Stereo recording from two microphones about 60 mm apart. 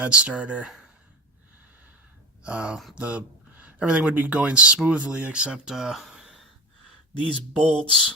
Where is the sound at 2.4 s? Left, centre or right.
Centre.